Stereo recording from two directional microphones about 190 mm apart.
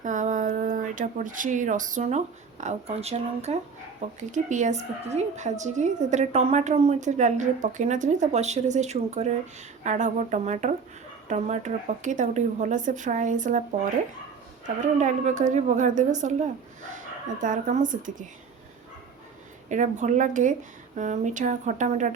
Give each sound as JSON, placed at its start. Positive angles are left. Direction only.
{"t": 0.0, "sound": "a woman's voice", "side_deg": -40}
{"t": 14.9, "sound": "a woman's voice", "side_deg": -40}
{"t": 19.6, "sound": "a woman's voice", "side_deg": -40}